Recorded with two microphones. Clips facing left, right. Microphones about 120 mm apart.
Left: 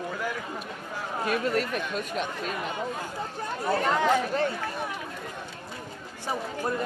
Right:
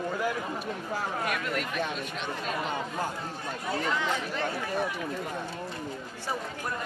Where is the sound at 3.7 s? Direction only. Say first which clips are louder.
Left 6 dB; 50° left (ahead or behind).